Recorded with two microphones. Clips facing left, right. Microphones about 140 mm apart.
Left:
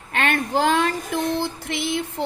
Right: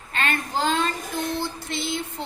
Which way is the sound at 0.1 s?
65° left (ahead or behind).